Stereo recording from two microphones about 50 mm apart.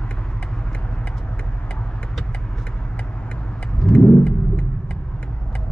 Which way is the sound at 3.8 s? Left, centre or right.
Left.